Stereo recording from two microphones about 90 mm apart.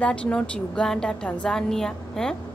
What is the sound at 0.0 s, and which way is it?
A woman's voice, 15° left (ahead or behind).